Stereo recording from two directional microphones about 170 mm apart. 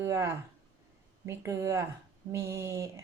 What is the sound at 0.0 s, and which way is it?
Speech, 15° right (ahead or behind).